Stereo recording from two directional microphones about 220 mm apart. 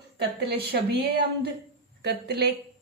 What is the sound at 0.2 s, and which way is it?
A woman's voice, 50° right (ahead or behind).